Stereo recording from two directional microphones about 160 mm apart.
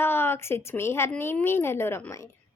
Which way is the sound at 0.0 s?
15° left (ahead or behind).